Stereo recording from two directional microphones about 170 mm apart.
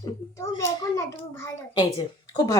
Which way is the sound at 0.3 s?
15° left (ahead or behind).